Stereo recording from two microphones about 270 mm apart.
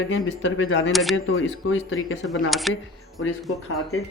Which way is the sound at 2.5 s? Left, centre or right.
Centre.